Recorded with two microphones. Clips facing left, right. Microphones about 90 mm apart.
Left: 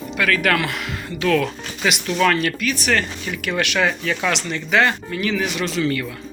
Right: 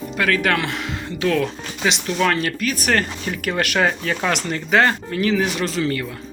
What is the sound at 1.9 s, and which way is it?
Speech, 30° right (ahead or behind).